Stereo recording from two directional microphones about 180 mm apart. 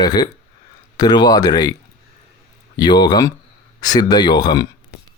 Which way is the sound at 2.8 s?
25° left (ahead or behind).